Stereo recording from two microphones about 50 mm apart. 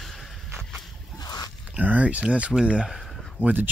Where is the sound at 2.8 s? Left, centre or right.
Centre.